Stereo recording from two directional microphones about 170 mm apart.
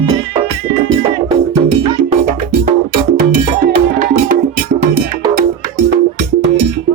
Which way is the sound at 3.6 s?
55° right (ahead or behind).